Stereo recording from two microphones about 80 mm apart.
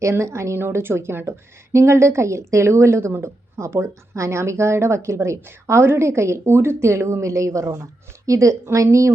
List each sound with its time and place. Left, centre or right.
0.0 s a woman's voice: right